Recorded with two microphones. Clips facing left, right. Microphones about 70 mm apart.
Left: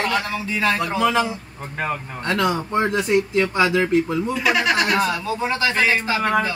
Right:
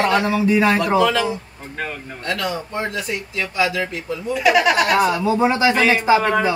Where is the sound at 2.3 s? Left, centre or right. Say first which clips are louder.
Left 4 dB; left.